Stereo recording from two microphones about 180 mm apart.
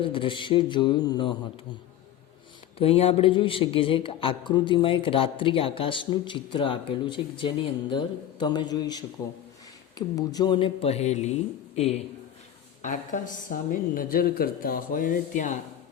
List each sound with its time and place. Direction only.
0.0 s a man's voice: 30° left (ahead or behind)
2.7 s a man's voice: 30° left (ahead or behind)